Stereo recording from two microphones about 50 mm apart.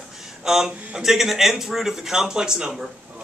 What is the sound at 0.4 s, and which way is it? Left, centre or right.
A man's voice, centre.